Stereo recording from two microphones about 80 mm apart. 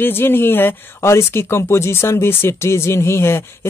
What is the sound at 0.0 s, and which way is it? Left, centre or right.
Speech, left.